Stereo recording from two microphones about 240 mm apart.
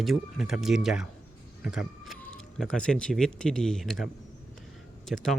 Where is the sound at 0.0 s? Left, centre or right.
Centre.